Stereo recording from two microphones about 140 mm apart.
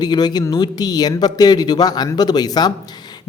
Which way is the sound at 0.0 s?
30° left (ahead or behind).